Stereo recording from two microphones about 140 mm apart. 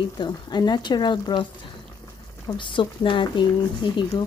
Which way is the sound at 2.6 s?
35° left (ahead or behind).